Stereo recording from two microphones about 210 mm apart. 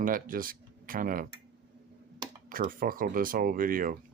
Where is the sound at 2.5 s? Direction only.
40° right (ahead or behind).